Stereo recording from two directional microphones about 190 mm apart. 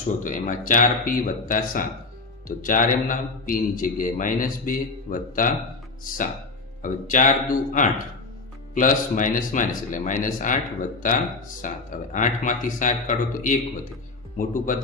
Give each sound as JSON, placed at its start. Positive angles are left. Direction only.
{"t": 0.2, "sound": "a man's voice", "side_deg": 45}
{"t": 6.8, "sound": "a man's voice", "side_deg": 45}